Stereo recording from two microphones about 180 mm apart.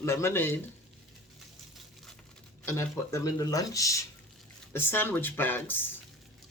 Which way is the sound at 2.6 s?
15° left (ahead or behind).